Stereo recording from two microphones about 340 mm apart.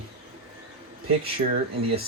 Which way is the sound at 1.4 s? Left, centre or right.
Right.